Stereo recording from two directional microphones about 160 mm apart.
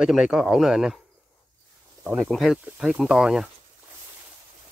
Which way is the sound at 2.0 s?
Centre (ahead or behind).